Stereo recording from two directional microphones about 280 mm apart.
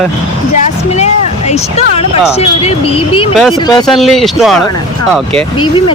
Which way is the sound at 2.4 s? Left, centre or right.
Left.